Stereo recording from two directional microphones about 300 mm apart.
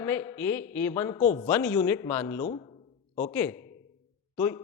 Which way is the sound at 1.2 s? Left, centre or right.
Left.